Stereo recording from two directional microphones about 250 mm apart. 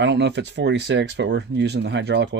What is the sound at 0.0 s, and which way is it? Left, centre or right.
Speech, right.